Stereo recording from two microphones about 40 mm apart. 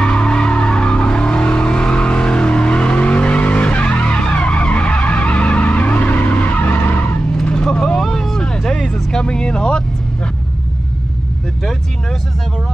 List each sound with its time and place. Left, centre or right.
0.0 s vehicle: left
7.8 s vehicle: centre